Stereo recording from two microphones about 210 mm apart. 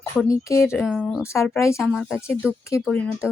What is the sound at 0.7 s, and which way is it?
Speech, centre (ahead or behind).